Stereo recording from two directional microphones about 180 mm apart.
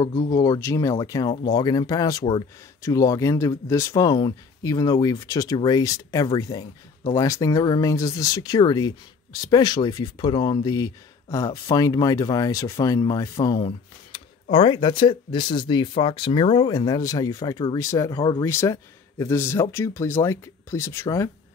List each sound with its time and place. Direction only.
0.3 s speech: 20° left (ahead or behind)